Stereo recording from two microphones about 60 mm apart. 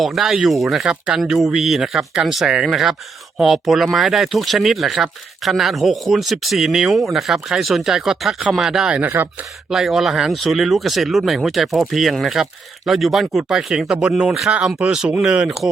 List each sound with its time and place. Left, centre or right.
0.0 s speech: centre
8.9 s speech: right
9.6 s speech: centre